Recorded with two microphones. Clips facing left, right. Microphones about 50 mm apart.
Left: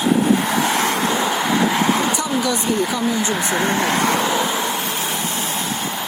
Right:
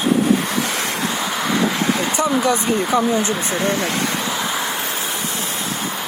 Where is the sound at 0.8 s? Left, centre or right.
Left.